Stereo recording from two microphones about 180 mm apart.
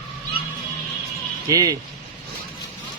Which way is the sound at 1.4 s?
20° right (ahead or behind).